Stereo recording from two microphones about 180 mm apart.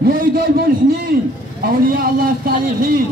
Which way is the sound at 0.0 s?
55° right (ahead or behind).